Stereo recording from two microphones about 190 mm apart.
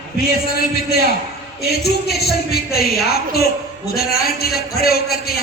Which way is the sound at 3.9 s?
55° left (ahead or behind).